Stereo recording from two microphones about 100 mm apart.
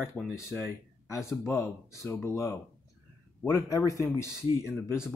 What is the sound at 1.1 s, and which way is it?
Speech, 30° left (ahead or behind).